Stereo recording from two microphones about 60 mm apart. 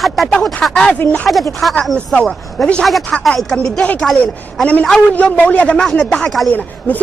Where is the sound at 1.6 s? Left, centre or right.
Centre.